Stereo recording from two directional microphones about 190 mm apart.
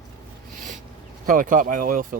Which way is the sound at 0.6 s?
40° right (ahead or behind).